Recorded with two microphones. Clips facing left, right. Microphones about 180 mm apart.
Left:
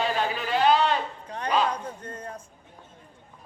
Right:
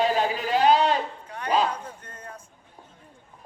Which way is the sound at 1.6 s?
30° left (ahead or behind).